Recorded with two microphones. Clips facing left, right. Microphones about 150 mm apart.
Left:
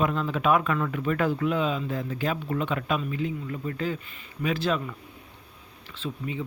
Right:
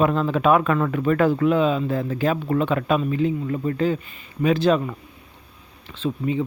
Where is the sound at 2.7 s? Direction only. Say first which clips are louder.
Right 7 dB; 35° right (ahead or behind).